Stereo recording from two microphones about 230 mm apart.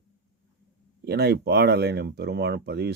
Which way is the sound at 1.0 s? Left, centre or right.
Right.